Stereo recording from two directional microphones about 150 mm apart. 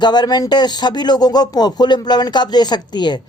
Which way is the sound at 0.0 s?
30° left (ahead or behind).